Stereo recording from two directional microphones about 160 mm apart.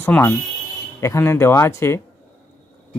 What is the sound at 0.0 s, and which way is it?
Speech, 15° left (ahead or behind).